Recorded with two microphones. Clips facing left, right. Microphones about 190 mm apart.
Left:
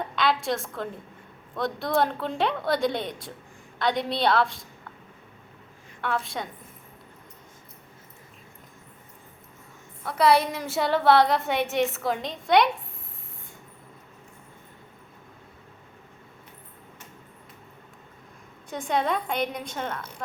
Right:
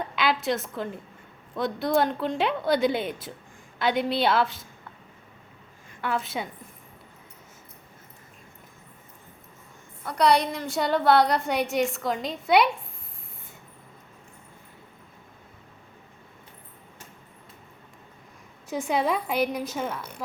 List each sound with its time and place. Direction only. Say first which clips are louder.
0.2 s a woman's voice: even; centre (ahead or behind)
6.0 s a woman's voice: right 1 dB; centre (ahead or behind)
10.0 s a woman's voice: left 1 dB; centre (ahead or behind)
18.7 s a woman's voice: right 1 dB; 5° right (ahead or behind)